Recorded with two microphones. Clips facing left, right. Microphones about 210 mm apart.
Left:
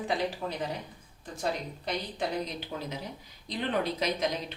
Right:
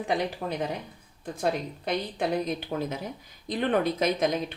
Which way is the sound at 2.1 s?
50° right (ahead or behind).